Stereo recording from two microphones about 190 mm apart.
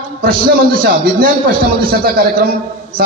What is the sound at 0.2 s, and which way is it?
A man's voice, 50° right (ahead or behind).